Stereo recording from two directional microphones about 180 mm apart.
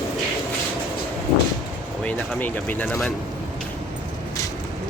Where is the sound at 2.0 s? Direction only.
10° left (ahead or behind).